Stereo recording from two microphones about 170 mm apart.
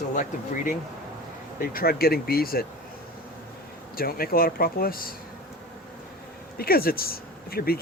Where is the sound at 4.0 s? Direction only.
60° left (ahead or behind).